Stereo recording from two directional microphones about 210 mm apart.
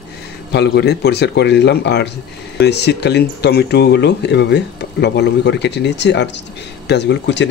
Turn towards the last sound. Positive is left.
turn(degrees=55)  # may be behind; listen again after turning